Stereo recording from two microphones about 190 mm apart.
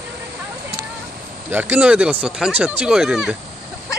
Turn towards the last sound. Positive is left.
turn(degrees=-5)  # may be behind; listen again after turning